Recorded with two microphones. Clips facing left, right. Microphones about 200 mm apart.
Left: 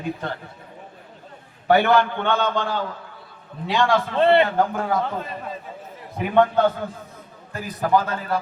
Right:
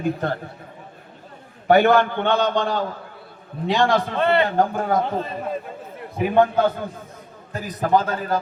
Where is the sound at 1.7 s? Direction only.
40° right (ahead or behind).